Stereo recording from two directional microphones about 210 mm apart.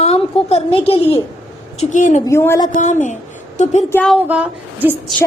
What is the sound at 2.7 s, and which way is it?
Speech, 35° left (ahead or behind).